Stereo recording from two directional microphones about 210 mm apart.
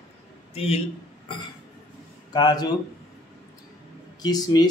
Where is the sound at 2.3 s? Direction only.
20° left (ahead or behind).